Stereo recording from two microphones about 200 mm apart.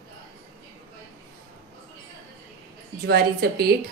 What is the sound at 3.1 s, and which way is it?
Speech, 50° right (ahead or behind).